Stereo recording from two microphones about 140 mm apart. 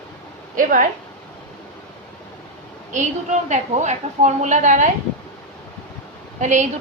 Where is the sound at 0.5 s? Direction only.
75° right (ahead or behind).